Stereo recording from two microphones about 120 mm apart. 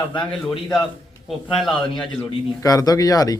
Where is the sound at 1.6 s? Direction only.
5° left (ahead or behind).